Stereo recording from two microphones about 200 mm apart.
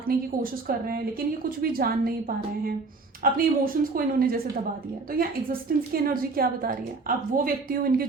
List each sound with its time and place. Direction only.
0.1 s a woman's voice: 45° right (ahead or behind)